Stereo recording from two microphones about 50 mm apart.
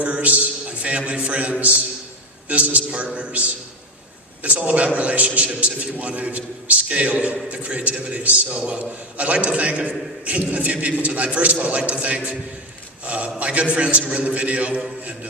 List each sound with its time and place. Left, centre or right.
0.0 s a man's voice: right
4.4 s a man's voice: right